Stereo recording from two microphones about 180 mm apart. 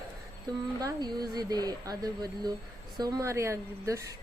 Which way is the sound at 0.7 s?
20° right (ahead or behind).